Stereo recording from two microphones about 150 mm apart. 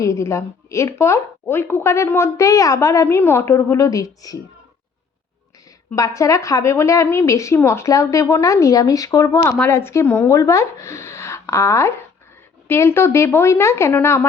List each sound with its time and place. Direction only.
0.0 s a woman's voice: 20° left (ahead or behind)
5.9 s a woman's voice: 20° left (ahead or behind)
9.5 s a woman's voice: 15° left (ahead or behind)